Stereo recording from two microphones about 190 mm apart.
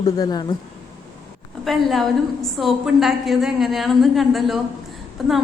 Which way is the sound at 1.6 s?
Centre (ahead or behind).